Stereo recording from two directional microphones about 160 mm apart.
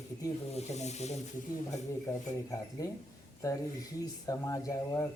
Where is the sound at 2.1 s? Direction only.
20° left (ahead or behind).